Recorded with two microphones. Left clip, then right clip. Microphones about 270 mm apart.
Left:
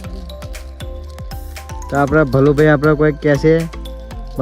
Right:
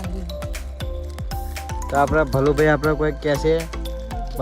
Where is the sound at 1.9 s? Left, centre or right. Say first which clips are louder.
Left 4 dB; left.